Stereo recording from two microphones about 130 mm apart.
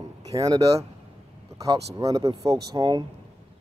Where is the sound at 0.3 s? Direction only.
25° right (ahead or behind).